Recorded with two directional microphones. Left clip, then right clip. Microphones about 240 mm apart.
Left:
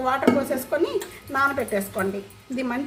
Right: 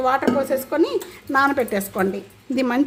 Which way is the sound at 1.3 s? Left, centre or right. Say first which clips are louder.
Right 4 dB; right.